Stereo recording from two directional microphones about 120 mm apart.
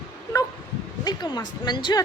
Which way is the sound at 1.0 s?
35° left (ahead or behind).